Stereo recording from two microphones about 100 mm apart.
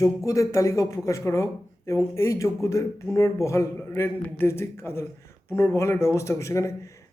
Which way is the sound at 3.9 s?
20° left (ahead or behind).